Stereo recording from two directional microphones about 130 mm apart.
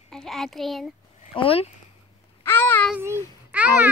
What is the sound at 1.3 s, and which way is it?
Speech, 45° left (ahead or behind).